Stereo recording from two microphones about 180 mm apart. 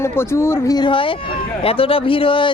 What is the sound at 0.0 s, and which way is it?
A man's voice, 15° left (ahead or behind).